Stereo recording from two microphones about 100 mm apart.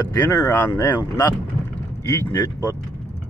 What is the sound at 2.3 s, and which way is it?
Speech, 40° left (ahead or behind).